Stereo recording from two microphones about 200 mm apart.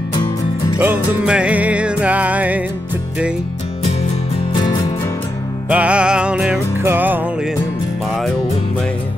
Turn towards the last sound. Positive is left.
turn(degrees=-10)  # may be behind; listen again after turning